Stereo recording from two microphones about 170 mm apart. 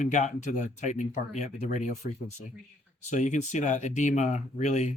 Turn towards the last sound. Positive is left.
turn(degrees=45)  # may be behind; listen again after turning